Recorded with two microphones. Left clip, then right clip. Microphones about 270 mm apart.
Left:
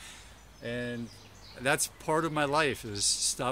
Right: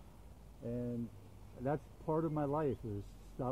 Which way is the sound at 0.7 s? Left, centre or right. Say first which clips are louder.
Left 7 dB; left.